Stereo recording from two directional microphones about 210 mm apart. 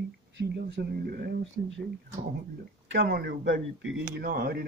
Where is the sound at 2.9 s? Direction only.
50° right (ahead or behind).